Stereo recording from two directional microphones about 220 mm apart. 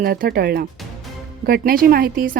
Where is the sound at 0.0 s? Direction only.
45° right (ahead or behind).